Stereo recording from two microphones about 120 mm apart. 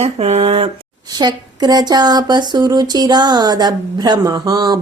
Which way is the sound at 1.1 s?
35° right (ahead or behind).